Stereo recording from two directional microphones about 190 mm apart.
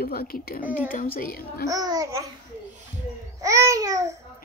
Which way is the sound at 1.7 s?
20° right (ahead or behind).